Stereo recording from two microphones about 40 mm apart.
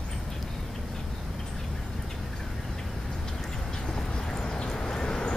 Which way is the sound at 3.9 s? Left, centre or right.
Centre.